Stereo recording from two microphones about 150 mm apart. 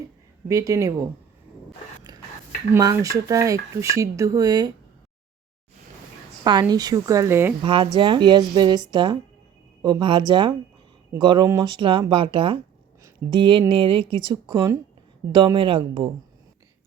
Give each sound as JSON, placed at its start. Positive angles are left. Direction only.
{"t": 0.4, "sound": "speech", "side_deg": -20}
{"t": 2.1, "sound": "whispering", "side_deg": -25}
{"t": 2.7, "sound": "speech", "side_deg": -20}
{"t": 6.4, "sound": "speech", "side_deg": -25}
{"t": 7.6, "sound": "speech", "side_deg": -35}